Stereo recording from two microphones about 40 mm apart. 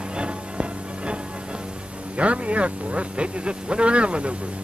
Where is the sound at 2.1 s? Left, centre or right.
Right.